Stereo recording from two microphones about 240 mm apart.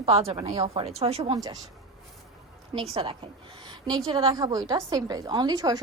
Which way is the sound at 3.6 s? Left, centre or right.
Centre.